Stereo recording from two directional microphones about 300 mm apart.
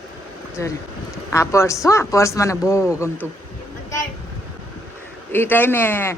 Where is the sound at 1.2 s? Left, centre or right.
Centre.